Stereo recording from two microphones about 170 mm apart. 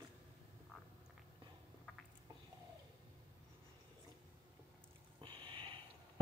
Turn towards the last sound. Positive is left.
turn(degrees=-30)  # may be behind; listen again after turning